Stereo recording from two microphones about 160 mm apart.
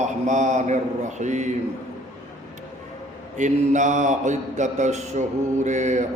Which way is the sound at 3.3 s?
50° right (ahead or behind).